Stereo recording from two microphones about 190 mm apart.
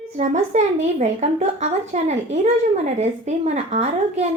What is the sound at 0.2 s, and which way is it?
A woman's voice, 40° right (ahead or behind).